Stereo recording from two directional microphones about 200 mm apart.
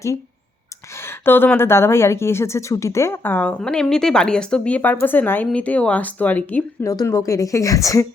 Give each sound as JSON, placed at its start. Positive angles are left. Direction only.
{"t": 1.0, "sound": "speech", "side_deg": 10}